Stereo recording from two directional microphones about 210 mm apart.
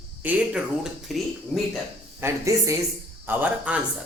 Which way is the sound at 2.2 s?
15° right (ahead or behind).